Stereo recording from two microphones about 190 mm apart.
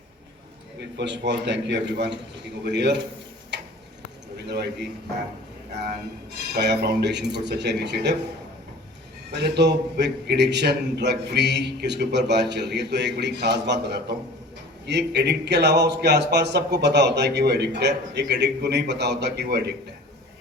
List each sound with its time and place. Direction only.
0.9 s a man's voice: 70° right (ahead or behind)
4.4 s a man's voice: 60° right (ahead or behind)
6.5 s a man's voice: 65° right (ahead or behind)
9.3 s a man's voice: 65° right (ahead or behind)